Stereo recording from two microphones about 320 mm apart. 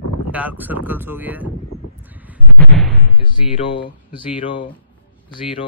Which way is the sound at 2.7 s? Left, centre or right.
Centre.